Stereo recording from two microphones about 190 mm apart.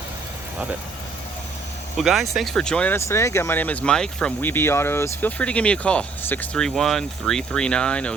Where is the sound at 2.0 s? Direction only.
Centre (ahead or behind).